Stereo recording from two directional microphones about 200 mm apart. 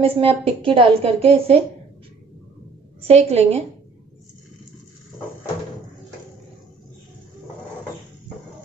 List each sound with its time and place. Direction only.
0.0 s a woman's voice: 30° right (ahead or behind)
3.0 s a woman's voice: 30° right (ahead or behind)